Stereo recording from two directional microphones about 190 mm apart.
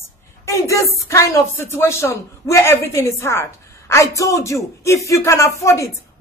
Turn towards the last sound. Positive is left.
turn(degrees=15)  # may be behind; listen again after turning